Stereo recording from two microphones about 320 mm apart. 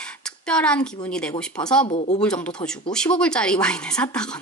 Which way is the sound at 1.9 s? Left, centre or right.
Left.